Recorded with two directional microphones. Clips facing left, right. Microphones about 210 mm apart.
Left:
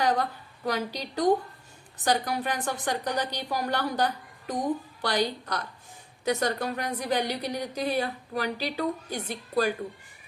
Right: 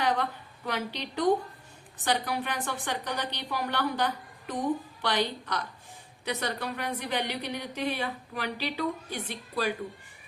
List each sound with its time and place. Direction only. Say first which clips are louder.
0.0 s a woman's voice: left 2 dB; 40° left (ahead or behind)